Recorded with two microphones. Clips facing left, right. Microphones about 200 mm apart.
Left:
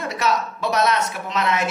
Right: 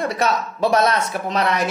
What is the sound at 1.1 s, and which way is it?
Speech, 35° right (ahead or behind).